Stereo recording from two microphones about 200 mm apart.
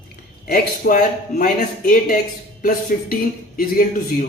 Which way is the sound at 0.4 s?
45° left (ahead or behind).